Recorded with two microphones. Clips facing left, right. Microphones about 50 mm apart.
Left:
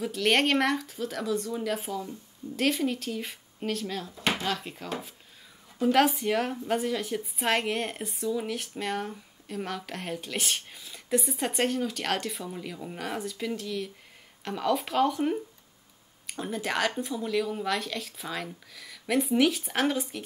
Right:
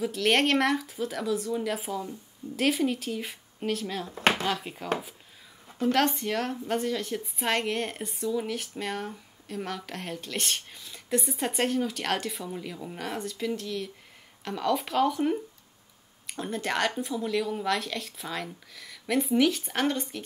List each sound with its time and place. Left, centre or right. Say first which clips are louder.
0.0 s a woman's voice: right 1 dB; centre
4.1 s speech: right 6 dB; right
4.5 s speech: right 1 dB; centre
5.8 s a woman's voice: left 2 dB; centre